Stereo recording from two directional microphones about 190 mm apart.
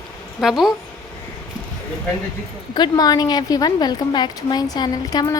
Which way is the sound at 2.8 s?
20° left (ahead or behind).